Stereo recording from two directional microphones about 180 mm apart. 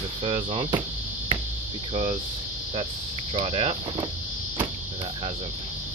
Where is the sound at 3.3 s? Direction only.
35° right (ahead or behind).